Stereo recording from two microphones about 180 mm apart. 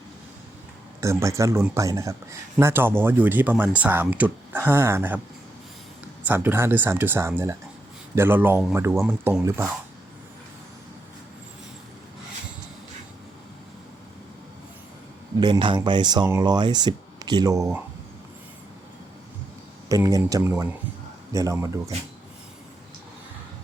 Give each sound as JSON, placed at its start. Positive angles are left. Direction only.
{"t": 1.0, "sound": "speech", "side_deg": -15}
{"t": 6.2, "sound": "speech", "side_deg": -10}
{"t": 15.4, "sound": "speech", "side_deg": -25}
{"t": 19.9, "sound": "speech", "side_deg": -20}